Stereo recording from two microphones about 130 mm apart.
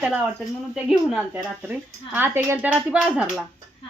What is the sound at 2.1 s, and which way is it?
A woman's voice, 15° right (ahead or behind).